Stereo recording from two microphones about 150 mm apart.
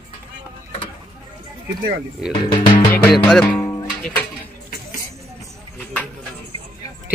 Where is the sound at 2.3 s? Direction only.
35° left (ahead or behind).